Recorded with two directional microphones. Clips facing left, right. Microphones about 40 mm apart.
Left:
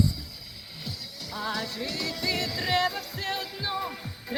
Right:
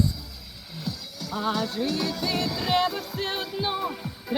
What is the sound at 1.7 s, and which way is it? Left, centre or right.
Music, right.